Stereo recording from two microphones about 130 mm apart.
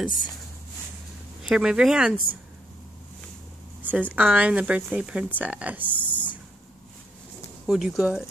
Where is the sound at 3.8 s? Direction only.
15° right (ahead or behind).